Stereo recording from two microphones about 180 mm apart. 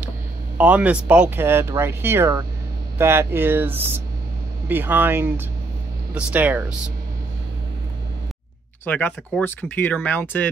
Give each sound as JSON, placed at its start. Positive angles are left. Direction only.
{"t": 0.6, "sound": "speech", "side_deg": -10}
{"t": 8.8, "sound": "speech", "side_deg": 10}